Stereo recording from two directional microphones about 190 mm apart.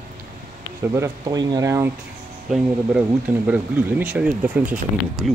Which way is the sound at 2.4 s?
Centre (ahead or behind).